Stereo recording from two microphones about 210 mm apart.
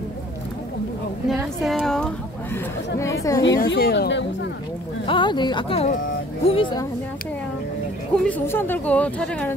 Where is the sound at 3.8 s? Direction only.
50° left (ahead or behind).